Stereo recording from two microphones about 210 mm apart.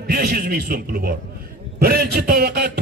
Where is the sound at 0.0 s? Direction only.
50° right (ahead or behind).